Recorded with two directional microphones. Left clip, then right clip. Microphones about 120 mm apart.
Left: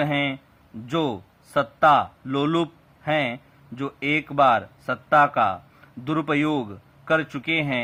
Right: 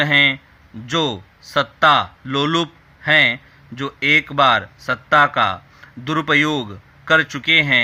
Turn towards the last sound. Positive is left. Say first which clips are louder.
# right 10 dB
turn(degrees=-20)  # may be behind; listen again after turning